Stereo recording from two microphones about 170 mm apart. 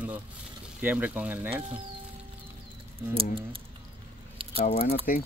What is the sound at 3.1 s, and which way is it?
Speech, 30° right (ahead or behind).